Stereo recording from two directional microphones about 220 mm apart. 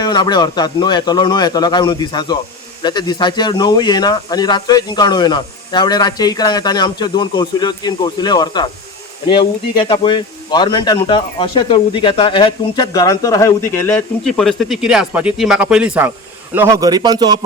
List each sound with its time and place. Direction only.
0.0 s speech: 20° left (ahead or behind)
9.7 s a man's voice: 20° left (ahead or behind); by 17.4 s 20° right (ahead or behind)